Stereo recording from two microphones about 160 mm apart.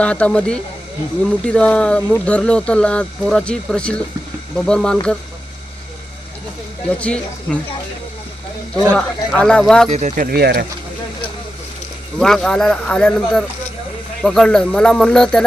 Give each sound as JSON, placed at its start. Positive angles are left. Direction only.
{"t": 0.0, "sound": "speech", "side_deg": 10}
{"t": 7.0, "sound": "speech", "side_deg": 10}
{"t": 8.7, "sound": "speech", "side_deg": 10}
{"t": 9.9, "sound": "speech", "side_deg": -45}
{"t": 10.2, "sound": "speech", "side_deg": -75}
{"t": 12.2, "sound": "speech", "side_deg": 5}